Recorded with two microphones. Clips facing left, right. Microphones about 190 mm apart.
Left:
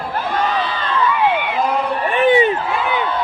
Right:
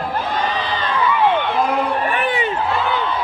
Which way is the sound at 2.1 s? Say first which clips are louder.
Left 8 dB; 20° left (ahead or behind).